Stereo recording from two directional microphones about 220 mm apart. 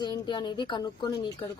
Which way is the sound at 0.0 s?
20° left (ahead or behind).